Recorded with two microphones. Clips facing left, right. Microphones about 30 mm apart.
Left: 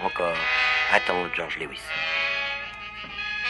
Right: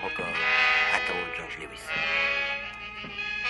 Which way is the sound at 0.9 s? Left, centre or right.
Left.